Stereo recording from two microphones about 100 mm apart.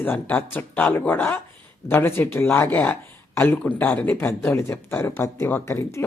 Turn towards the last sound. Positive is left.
turn(degrees=25)  # may be behind; listen again after turning